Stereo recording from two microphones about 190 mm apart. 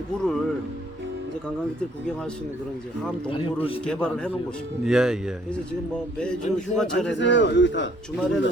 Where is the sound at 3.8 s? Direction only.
5° left (ahead or behind).